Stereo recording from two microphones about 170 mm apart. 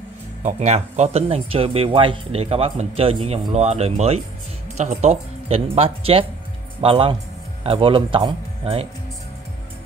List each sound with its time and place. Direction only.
0.4 s speech: 40° right (ahead or behind)